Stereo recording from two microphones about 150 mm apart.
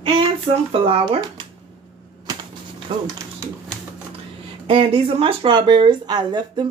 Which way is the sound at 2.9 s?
30° right (ahead or behind).